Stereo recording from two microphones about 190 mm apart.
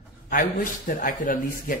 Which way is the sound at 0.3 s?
45° left (ahead or behind).